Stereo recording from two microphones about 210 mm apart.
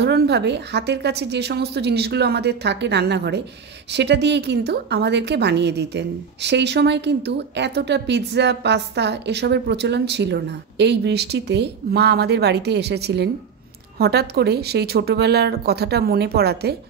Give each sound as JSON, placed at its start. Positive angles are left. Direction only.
{"t": 0.0, "sound": "a woman's voice", "side_deg": -55}